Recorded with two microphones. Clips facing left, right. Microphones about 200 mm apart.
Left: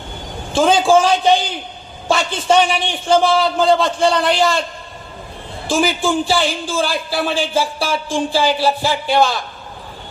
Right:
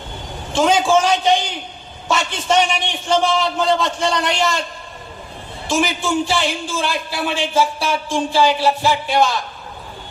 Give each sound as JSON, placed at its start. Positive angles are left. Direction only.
{"t": 0.5, "sound": "a man's voice", "side_deg": 30}
{"t": 5.6, "sound": "a man's voice", "side_deg": 30}